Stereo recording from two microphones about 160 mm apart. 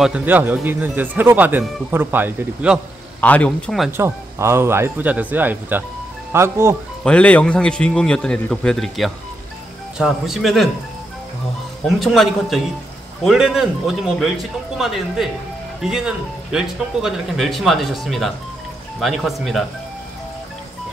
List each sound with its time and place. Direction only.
0.0 s speech: 10° right (ahead or behind)
3.2 s a man's voice: 10° left (ahead or behind)
3.9 s speech: 15° right (ahead or behind)
7.1 s a man's voice: 10° left (ahead or behind)
12.0 s a man's voice: centre (ahead or behind)